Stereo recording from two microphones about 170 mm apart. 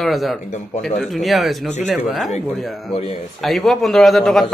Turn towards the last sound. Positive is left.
turn(degrees=0)  # may be behind; listen again after turning